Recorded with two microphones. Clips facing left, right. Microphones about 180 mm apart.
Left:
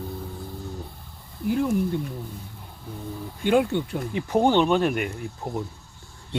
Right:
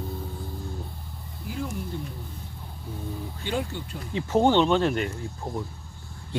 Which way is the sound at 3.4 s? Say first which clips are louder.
Left 11 dB; 55° left (ahead or behind).